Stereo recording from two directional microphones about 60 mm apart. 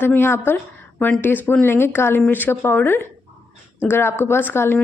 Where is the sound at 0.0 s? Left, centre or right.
Left.